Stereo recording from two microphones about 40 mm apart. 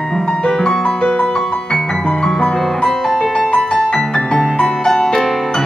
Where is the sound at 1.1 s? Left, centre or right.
Left.